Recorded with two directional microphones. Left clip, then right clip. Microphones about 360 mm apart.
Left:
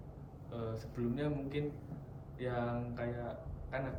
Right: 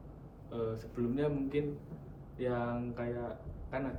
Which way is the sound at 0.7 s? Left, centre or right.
Centre.